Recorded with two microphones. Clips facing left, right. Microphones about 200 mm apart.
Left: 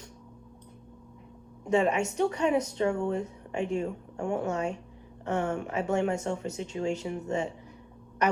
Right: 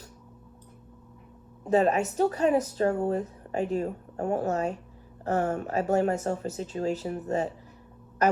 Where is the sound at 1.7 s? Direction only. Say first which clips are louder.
Right 2 dB; 40° right (ahead or behind).